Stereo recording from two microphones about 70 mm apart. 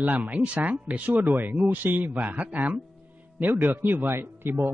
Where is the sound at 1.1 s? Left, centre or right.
Right.